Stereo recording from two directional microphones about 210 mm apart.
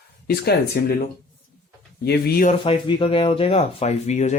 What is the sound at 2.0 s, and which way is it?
Speech, 50° left (ahead or behind).